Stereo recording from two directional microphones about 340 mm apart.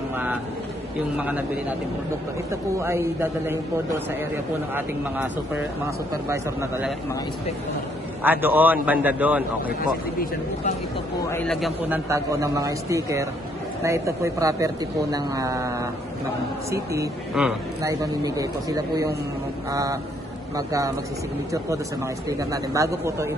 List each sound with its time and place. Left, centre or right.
1.1 s a man's voice: centre
2.5 s speech: centre
4.7 s a man's voice: centre
8.2 s a man's voice: centre
11.2 s speech: centre
22.4 s speech: centre